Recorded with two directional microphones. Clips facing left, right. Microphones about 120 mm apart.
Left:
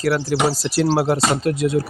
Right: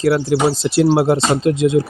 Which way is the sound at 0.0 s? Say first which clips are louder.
Right 4 dB; 25° right (ahead or behind).